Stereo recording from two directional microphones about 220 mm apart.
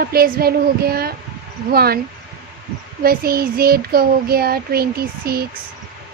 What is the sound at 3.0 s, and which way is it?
A child's voice, 45° right (ahead or behind).